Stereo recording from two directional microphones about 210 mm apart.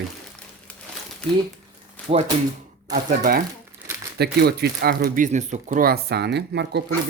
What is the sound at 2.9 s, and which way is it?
Speech, 45° right (ahead or behind).